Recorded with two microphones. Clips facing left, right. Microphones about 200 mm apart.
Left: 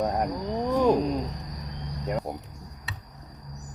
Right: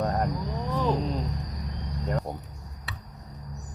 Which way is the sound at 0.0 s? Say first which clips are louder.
Left 1 dB; 10° left (ahead or behind).